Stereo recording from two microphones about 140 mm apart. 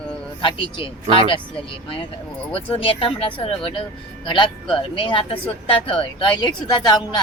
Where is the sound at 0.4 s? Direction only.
40° left (ahead or behind).